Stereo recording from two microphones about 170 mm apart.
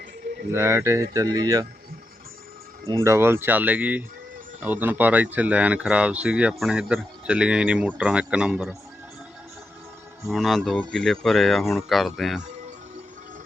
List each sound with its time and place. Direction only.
0.5 s speech: 15° right (ahead or behind)
2.9 s speech: 15° right (ahead or behind)
10.2 s speech: centre (ahead or behind)